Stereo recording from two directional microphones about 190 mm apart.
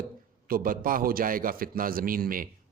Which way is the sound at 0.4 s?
50° right (ahead or behind).